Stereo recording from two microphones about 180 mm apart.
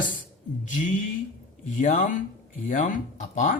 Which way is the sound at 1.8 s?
45° left (ahead or behind).